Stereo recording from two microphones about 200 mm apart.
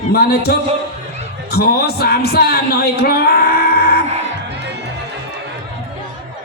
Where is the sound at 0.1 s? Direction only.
50° left (ahead or behind).